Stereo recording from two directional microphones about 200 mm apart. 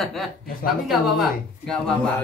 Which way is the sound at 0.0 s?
Centre (ahead or behind).